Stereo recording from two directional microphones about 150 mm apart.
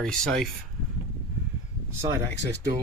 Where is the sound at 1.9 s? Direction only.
20° right (ahead or behind).